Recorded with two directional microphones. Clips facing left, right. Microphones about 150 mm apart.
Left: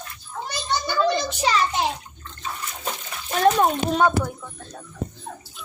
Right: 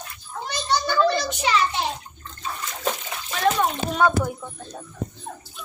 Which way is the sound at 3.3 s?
40° left (ahead or behind).